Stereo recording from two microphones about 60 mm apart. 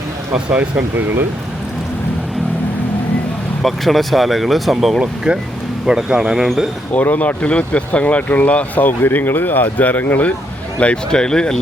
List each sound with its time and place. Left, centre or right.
0.8 s speech: right
3.6 s speech: centre
4.9 s speech: centre
6.9 s speech: left
10.8 s speech: centre